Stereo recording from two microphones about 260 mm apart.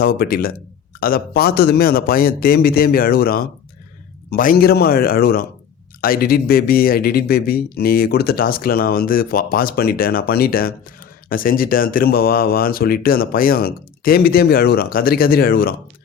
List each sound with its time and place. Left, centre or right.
0.0 s speech: left